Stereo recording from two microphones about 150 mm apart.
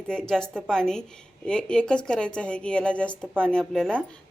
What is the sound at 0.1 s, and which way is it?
A woman's voice, 5° left (ahead or behind).